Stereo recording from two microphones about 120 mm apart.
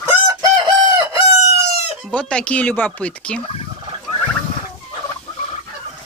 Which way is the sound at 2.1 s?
10° left (ahead or behind).